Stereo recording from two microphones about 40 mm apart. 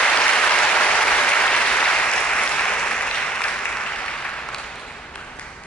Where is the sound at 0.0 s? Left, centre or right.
Left.